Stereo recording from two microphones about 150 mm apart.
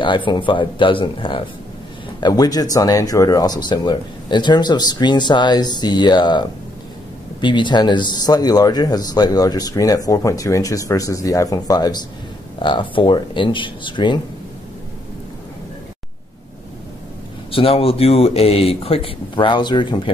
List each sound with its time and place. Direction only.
0.0 s a man's voice: 30° left (ahead or behind)
17.5 s speech: 40° left (ahead or behind)